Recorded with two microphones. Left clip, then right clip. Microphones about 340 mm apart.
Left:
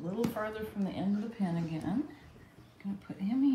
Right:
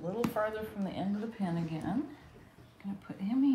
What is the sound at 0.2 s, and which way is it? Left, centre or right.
A woman's voice, centre.